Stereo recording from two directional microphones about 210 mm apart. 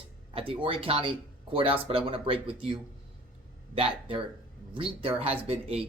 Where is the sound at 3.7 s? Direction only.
25° right (ahead or behind).